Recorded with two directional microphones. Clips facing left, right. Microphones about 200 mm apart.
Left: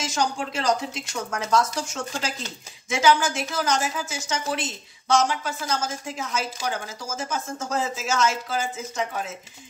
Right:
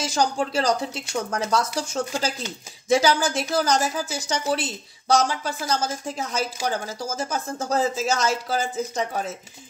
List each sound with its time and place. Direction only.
0.0 s speech: 35° right (ahead or behind)